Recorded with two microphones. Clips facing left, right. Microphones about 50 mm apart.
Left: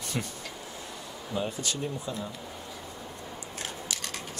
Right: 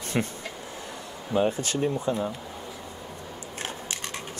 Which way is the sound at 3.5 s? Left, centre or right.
Right.